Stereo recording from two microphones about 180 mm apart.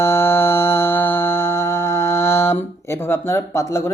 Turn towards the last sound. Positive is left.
turn(degrees=15)  # may be behind; listen again after turning